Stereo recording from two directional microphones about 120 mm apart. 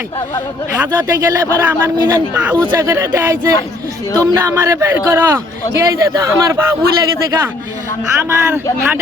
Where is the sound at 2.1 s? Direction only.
15° right (ahead or behind).